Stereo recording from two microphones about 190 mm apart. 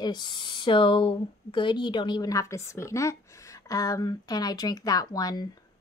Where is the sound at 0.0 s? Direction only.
20° left (ahead or behind).